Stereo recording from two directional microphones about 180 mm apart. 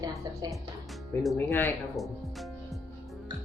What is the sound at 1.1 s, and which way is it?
Speech, 10° left (ahead or behind).